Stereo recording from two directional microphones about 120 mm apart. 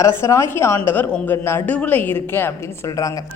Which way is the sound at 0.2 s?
25° left (ahead or behind).